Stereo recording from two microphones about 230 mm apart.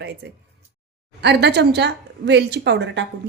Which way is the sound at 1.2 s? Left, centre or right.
Right.